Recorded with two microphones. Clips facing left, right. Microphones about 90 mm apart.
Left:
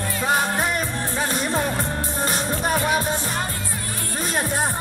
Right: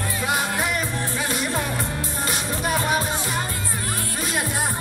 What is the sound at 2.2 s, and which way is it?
Music, 40° left (ahead or behind).